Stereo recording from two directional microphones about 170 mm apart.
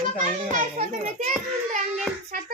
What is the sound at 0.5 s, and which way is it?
Speech, 50° right (ahead or behind).